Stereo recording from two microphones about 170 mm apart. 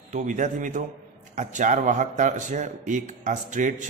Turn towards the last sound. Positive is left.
turn(degrees=-45)  # may be behind; listen again after turning